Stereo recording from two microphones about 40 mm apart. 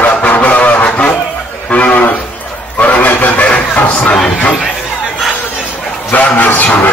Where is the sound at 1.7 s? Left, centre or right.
Left.